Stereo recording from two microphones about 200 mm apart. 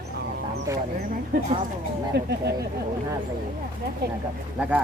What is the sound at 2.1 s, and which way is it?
Speech, 55° right (ahead or behind).